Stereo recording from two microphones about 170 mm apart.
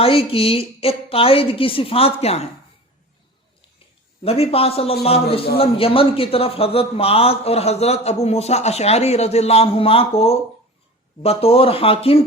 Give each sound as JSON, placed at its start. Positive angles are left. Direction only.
{"t": 0.0, "sound": "a man's voice", "side_deg": 30}
{"t": 4.2, "sound": "a man's voice", "side_deg": 35}